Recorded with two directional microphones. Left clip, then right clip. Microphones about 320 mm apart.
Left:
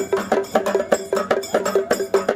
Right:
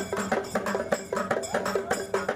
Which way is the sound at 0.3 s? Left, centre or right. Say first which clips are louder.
Left 9 dB; left.